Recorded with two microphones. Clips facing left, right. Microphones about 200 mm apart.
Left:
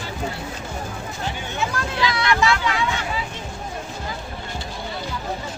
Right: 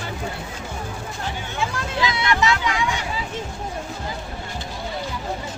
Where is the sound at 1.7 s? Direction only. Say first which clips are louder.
Left 2 dB; 20° right (ahead or behind).